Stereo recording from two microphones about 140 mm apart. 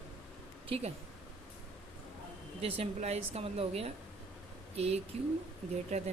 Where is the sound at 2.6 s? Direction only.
50° right (ahead or behind).